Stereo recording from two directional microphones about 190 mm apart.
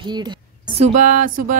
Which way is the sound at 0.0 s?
25° right (ahead or behind).